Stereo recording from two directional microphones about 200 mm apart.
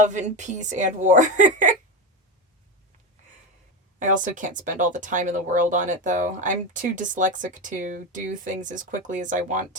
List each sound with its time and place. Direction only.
0.0 s speech: 35° right (ahead or behind)
4.0 s speech: 40° right (ahead or behind)